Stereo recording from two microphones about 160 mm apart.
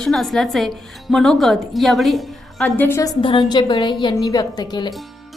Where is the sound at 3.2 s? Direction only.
30° left (ahead or behind).